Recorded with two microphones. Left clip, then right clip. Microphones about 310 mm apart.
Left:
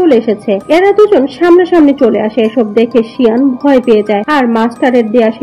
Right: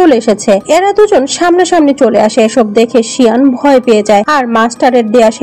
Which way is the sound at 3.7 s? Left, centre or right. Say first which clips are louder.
Even; right.